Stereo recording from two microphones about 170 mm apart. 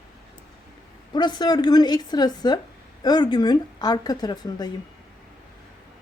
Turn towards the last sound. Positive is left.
turn(degrees=25)  # may be behind; listen again after turning